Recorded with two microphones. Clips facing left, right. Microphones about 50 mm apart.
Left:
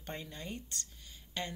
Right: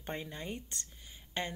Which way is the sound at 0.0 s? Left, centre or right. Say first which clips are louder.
Right 3 dB; right.